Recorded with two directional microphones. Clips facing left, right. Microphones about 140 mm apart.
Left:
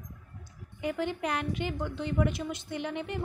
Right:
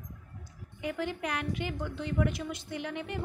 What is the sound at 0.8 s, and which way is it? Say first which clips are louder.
A woman's voice: left 2 dB; 30° left (ahead or behind).